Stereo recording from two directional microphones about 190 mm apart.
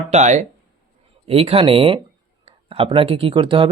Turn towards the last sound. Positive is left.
turn(degrees=-25)  # may be behind; listen again after turning